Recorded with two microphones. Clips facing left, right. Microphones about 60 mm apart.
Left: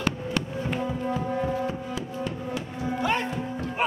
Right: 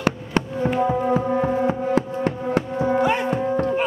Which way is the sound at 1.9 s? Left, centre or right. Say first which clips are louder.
Right 10 dB; right.